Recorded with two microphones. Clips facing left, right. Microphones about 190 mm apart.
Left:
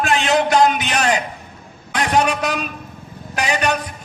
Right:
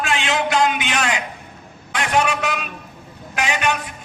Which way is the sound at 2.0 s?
35° left (ahead or behind).